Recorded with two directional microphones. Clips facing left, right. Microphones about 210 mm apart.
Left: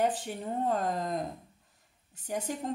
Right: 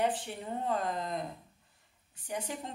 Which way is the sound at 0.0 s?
40° left (ahead or behind).